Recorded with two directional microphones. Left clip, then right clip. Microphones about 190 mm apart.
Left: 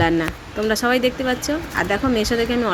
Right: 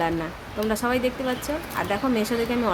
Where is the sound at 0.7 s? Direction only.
15° left (ahead or behind).